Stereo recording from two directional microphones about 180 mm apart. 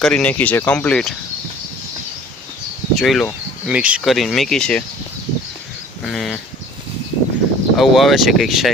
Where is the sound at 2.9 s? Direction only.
Centre (ahead or behind).